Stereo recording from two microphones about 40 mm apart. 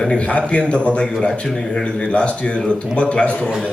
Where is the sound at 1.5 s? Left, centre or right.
Centre.